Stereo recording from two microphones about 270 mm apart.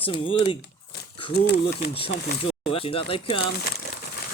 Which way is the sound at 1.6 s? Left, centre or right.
Left.